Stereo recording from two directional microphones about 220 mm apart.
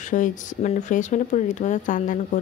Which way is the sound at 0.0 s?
35° left (ahead or behind).